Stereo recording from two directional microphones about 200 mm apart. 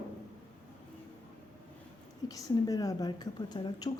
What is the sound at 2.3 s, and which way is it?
Speech, 15° left (ahead or behind).